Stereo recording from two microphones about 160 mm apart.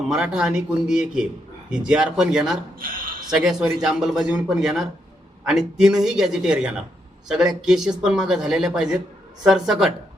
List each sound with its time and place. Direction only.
0.1 s speech: 5° right (ahead or behind)
2.7 s a man's voice: 65° right (ahead or behind)
3.3 s speech: 5° right (ahead or behind)